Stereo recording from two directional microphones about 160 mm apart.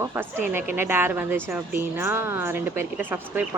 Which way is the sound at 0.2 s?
15° right (ahead or behind).